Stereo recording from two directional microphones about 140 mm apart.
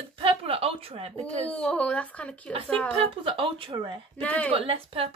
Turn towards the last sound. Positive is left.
turn(degrees=-40)  # may be behind; listen again after turning